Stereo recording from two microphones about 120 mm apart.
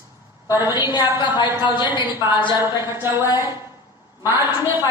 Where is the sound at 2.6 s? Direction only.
20° right (ahead or behind).